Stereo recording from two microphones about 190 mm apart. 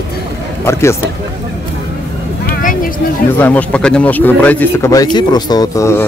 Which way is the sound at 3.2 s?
10° left (ahead or behind).